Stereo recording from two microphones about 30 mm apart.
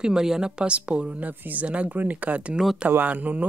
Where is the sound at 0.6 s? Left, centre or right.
Right.